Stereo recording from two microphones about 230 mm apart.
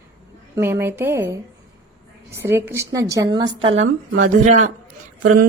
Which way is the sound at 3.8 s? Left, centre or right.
Right.